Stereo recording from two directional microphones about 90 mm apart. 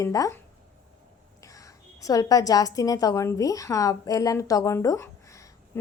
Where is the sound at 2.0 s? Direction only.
40° left (ahead or behind).